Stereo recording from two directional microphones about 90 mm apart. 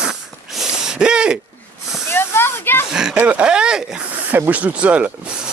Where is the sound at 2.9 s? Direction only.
5° right (ahead or behind).